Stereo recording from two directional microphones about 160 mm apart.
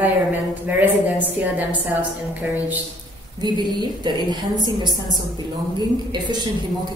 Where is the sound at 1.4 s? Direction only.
10° right (ahead or behind).